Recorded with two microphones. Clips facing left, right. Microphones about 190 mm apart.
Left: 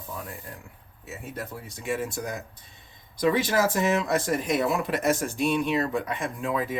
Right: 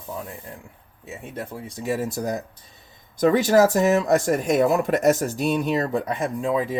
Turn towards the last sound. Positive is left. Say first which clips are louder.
# right 5 dB
turn(degrees=-25)  # may be behind; listen again after turning